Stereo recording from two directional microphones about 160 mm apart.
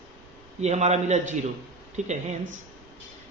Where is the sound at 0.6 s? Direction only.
45° right (ahead or behind).